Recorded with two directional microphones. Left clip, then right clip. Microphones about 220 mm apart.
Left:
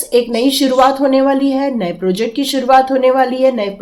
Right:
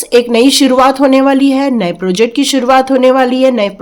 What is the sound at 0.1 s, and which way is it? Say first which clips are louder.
Speech: right 5 dB; 35° right (ahead or behind).